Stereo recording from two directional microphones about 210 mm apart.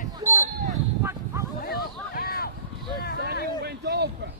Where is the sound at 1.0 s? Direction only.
10° right (ahead or behind).